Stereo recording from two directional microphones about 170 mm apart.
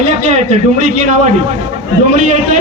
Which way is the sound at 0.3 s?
40° right (ahead or behind).